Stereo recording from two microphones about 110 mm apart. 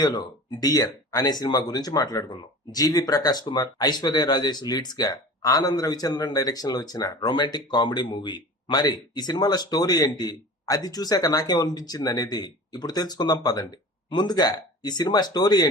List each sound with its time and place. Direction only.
0.0 s speech: 40° left (ahead or behind)